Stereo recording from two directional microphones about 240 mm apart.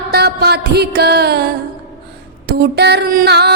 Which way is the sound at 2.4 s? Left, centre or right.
Right.